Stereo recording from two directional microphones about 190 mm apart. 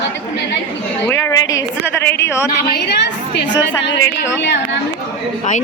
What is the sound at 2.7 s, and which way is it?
Speech, 60° left (ahead or behind).